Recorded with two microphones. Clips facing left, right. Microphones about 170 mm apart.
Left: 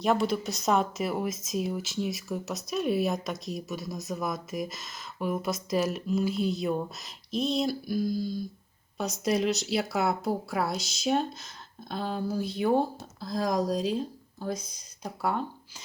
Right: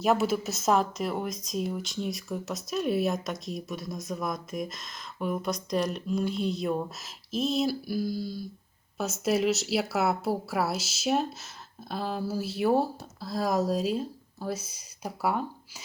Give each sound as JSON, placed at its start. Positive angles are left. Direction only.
{"t": 0.0, "sound": "a woman's voice", "side_deg": -5}